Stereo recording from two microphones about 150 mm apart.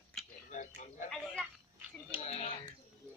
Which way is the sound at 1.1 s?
Centre (ahead or behind).